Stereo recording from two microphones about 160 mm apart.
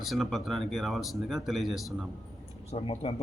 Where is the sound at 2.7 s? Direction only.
40° left (ahead or behind).